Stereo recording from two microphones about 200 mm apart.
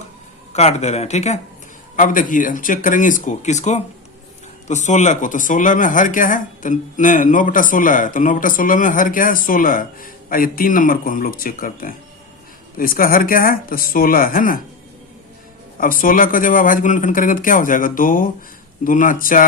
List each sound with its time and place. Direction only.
0.5 s speech: 35° left (ahead or behind)
15.8 s speech: 45° left (ahead or behind)